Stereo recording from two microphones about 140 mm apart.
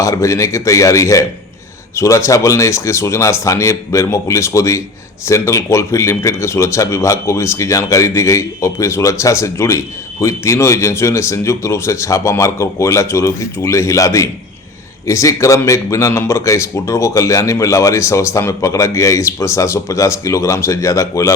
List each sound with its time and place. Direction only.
0.0 s speech: 20° left (ahead or behind)